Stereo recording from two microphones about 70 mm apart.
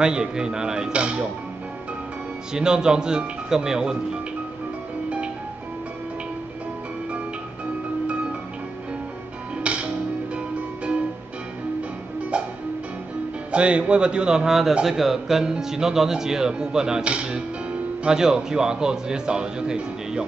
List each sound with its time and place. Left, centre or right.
0.0 s a man's voice: centre
2.5 s a man's voice: centre
8.1 s music: centre
9.6 s music: centre
13.5 s a man's voice: centre